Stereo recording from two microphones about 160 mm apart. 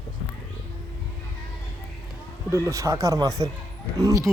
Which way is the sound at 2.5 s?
20° right (ahead or behind).